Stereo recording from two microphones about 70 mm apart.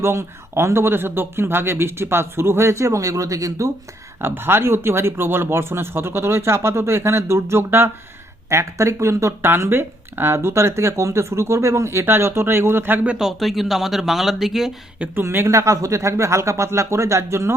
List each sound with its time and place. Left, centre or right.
0.0 s speech: right
4.2 s speech: right
13.1 s speech: centre
14.9 s speech: right
15.2 s speech: right
15.4 s speech: right